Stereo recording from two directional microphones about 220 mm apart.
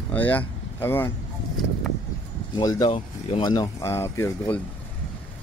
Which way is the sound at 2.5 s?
15° left (ahead or behind).